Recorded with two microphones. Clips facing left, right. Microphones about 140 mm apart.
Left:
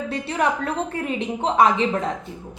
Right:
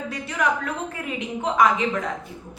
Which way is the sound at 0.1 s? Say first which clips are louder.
Left 2 dB; 30° left (ahead or behind).